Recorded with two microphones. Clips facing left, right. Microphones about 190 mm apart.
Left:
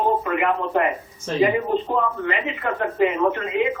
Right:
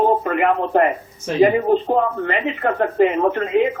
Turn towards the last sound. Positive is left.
turn(degrees=-40)  # may be behind; listen again after turning